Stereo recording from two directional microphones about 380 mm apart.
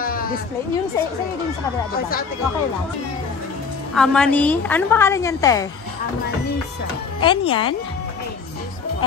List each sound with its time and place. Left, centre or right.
0.0 s sheep: left
3.9 s a woman's voice: centre
7.2 s speech: centre